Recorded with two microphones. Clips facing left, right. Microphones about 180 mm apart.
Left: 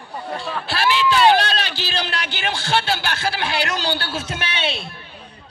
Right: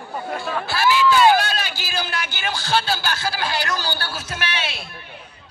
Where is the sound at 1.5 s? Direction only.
75° left (ahead or behind).